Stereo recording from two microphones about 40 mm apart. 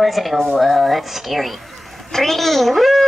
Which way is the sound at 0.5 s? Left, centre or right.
Centre.